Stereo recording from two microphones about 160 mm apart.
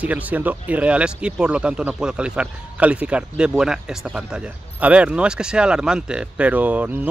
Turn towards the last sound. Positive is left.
turn(degrees=-10)  # may be behind; listen again after turning